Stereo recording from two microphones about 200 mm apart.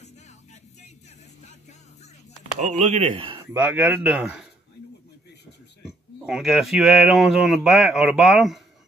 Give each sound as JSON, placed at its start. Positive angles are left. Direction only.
{"t": 2.6, "sound": "speech", "side_deg": -35}
{"t": 3.5, "sound": "speech", "side_deg": -5}
{"t": 6.2, "sound": "speech", "side_deg": 0}